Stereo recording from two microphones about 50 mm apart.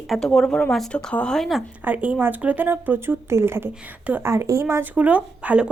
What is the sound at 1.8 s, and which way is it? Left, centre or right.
Speech, right.